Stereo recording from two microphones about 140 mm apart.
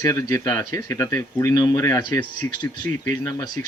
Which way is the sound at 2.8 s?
75° right (ahead or behind).